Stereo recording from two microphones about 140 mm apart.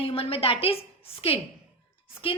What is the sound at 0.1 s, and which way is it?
A woman's voice, 45° left (ahead or behind).